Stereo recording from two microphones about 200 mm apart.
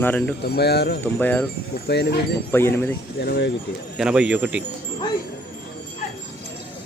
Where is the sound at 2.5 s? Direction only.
10° left (ahead or behind).